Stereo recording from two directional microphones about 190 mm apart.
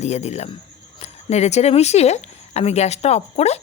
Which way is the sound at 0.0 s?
35° left (ahead or behind).